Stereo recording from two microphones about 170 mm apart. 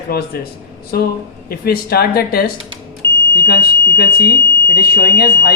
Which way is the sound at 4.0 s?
65° left (ahead or behind).